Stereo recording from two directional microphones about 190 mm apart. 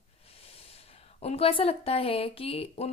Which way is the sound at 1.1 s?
30° left (ahead or behind).